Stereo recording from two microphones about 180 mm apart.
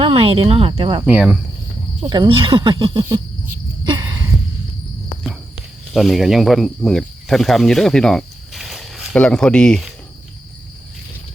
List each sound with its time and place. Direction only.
0.0 s speech: 30° right (ahead or behind)
1.0 s speech: 5° right (ahead or behind)
2.0 s speech: 25° right (ahead or behind)
5.9 s speech: centre (ahead or behind)